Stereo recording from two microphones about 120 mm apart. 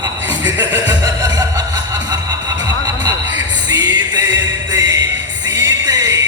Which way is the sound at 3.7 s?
35° right (ahead or behind).